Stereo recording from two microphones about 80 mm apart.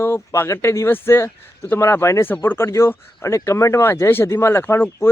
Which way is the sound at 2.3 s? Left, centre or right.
Left.